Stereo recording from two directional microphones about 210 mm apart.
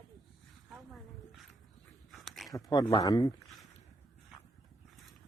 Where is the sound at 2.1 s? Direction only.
Centre (ahead or behind).